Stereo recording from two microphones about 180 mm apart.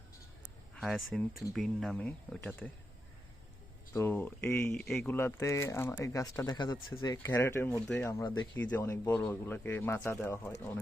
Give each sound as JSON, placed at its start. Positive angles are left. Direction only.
{"t": 0.8, "sound": "speech", "side_deg": 0}
{"t": 3.9, "sound": "speech", "side_deg": 10}